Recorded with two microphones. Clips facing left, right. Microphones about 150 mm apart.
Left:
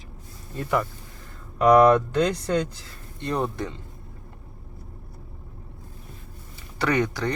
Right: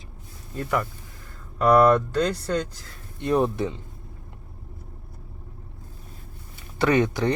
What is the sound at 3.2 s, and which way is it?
Speech, 15° right (ahead or behind).